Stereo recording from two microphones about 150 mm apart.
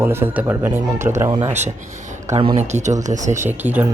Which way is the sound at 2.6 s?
50° right (ahead or behind).